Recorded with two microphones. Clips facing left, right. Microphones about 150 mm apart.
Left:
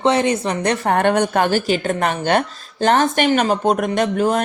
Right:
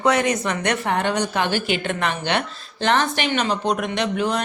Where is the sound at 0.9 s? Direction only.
55° left (ahead or behind).